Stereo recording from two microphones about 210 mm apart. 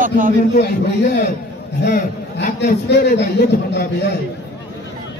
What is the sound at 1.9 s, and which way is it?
A man's voice, 50° left (ahead or behind).